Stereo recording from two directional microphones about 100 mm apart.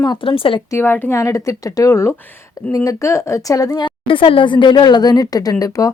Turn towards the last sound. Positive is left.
turn(degrees=35)  # may be behind; listen again after turning